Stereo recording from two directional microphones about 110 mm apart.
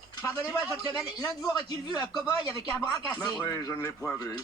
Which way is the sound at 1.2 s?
35° left (ahead or behind).